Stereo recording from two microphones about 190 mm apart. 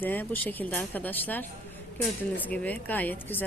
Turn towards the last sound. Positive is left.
turn(degrees=10)  # may be behind; listen again after turning